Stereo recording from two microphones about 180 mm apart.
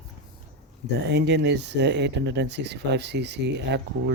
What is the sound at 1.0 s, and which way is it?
Speech, 70° right (ahead or behind).